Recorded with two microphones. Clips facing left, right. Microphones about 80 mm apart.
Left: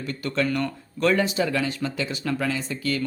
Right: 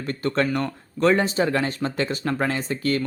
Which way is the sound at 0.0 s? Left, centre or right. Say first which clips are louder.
Right 3 dB; right.